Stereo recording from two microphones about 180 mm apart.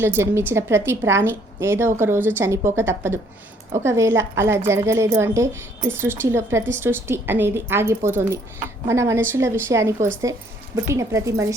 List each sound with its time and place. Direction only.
0.0 s speech: 15° right (ahead or behind)